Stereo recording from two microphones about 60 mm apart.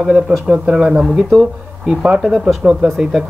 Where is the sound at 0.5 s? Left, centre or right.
Centre.